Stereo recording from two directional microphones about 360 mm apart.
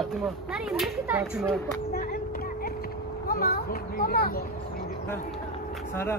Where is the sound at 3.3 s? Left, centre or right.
Left.